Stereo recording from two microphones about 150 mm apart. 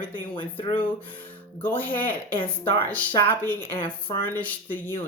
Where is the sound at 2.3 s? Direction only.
35° left (ahead or behind).